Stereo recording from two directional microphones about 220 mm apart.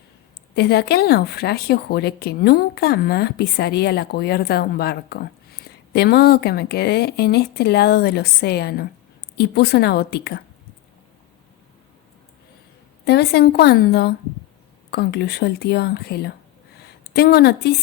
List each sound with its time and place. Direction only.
0.5 s speech: 45° left (ahead or behind)
13.1 s a woman's voice: 45° left (ahead or behind)